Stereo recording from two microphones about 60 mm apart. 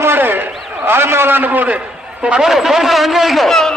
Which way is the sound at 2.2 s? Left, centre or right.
Centre.